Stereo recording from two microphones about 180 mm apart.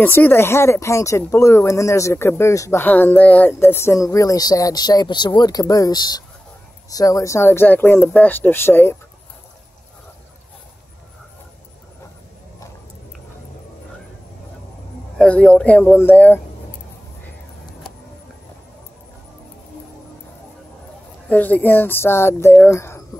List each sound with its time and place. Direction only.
0.0 s speech: 10° left (ahead or behind)
15.1 s speech: 5° left (ahead or behind)
21.3 s speech: 10° left (ahead or behind)